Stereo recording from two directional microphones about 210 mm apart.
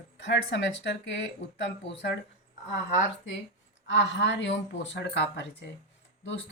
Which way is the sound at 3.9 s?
60° left (ahead or behind).